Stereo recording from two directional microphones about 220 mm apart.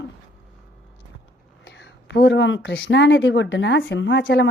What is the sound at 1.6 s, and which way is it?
Speech, 55° left (ahead or behind).